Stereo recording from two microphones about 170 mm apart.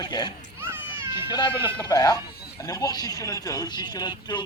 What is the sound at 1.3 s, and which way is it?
Speech, 30° left (ahead or behind).